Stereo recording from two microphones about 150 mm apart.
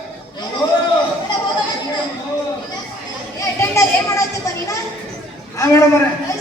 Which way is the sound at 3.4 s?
20° left (ahead or behind).